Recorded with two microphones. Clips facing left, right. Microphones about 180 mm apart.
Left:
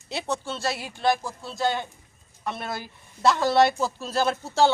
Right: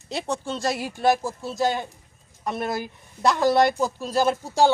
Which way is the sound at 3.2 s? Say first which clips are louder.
Right 1 dB; 15° right (ahead or behind).